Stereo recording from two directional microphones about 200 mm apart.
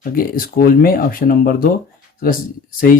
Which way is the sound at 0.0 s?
45° left (ahead or behind).